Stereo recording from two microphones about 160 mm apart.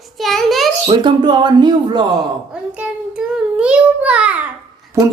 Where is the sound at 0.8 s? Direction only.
30° right (ahead or behind).